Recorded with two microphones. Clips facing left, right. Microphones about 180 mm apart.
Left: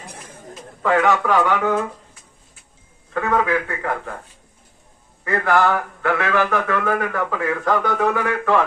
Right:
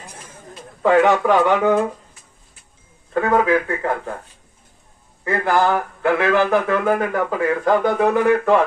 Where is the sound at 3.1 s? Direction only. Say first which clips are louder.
Right 3 dB; 25° right (ahead or behind).